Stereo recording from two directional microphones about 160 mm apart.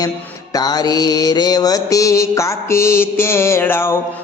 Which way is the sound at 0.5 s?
25° left (ahead or behind).